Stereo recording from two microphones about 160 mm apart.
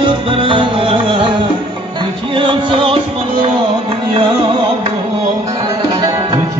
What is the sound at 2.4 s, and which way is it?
Music, 30° right (ahead or behind).